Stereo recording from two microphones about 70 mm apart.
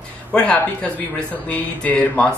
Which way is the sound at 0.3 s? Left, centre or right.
Centre.